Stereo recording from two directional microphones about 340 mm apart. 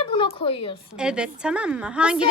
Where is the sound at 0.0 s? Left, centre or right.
Centre.